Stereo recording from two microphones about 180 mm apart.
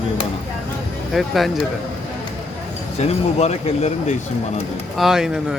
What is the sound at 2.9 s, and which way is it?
Speech, 35° left (ahead or behind).